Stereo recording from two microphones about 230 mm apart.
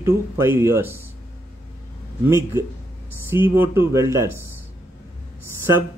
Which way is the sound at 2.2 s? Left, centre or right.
Centre.